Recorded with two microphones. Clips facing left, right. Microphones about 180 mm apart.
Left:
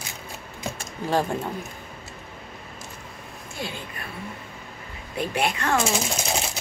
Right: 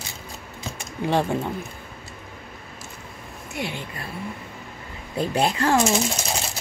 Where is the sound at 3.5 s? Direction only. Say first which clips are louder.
Right 4 dB; 20° right (ahead or behind).